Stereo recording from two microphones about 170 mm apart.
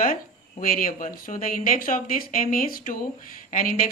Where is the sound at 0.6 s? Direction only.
55° left (ahead or behind).